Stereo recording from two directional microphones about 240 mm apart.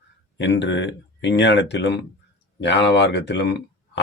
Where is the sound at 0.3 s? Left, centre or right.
Left.